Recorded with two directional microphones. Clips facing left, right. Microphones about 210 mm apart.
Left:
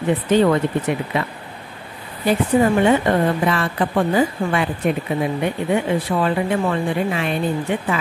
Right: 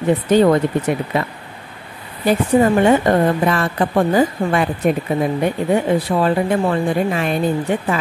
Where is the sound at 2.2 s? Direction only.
40° right (ahead or behind).